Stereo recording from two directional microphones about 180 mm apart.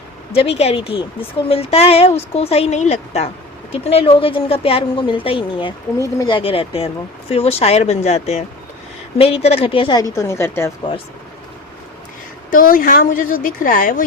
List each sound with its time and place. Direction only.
0.3 s a woman's voice: 35° left (ahead or behind); by 10.7 s 15° left (ahead or behind)
12.5 s a woman's voice: 50° left (ahead or behind)